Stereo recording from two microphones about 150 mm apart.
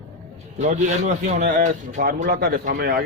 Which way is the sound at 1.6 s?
65° right (ahead or behind).